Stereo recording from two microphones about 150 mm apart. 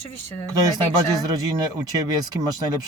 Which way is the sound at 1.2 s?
25° right (ahead or behind).